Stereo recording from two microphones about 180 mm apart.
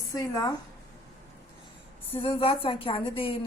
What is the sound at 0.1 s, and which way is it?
Speech, 20° left (ahead or behind).